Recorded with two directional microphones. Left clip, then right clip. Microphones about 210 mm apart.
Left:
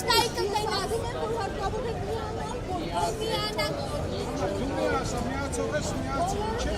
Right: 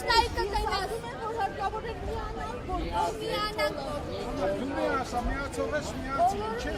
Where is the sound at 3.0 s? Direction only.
40° left (ahead or behind).